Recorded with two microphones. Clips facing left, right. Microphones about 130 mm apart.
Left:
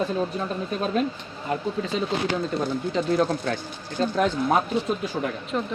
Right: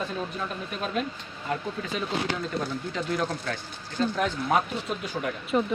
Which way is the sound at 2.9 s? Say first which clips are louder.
Left 7 dB; 30° left (ahead or behind).